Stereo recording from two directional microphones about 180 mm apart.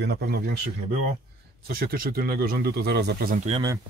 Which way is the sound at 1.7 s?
55° right (ahead or behind).